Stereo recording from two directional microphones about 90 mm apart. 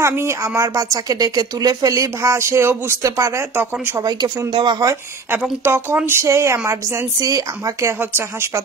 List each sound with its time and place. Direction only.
0.0 s speech: 30° right (ahead or behind)
3.5 s speech: 20° right (ahead or behind)
4.0 s speech: 45° right (ahead or behind)
4.5 s speech: 65° right (ahead or behind)
5.6 s speech: 25° right (ahead or behind)